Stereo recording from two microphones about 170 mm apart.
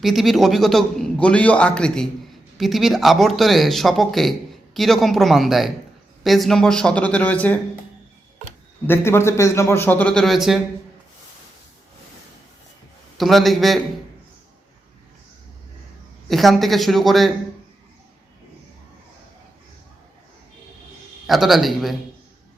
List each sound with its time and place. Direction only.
0.0 s a man's voice: centre (ahead or behind)
8.9 s a man's voice: 15° left (ahead or behind); by 10.6 s centre (ahead or behind)
13.1 s speech: centre (ahead or behind)
16.3 s speech: centre (ahead or behind)
21.2 s speech: centre (ahead or behind)